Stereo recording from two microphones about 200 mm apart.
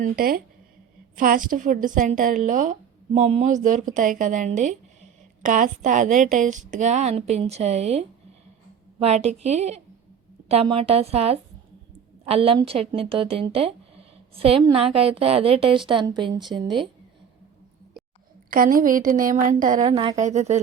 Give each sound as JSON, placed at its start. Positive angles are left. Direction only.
{"t": 0.0, "sound": "a woman's voice", "side_deg": -45}
{"t": 18.5, "sound": "speech", "side_deg": -45}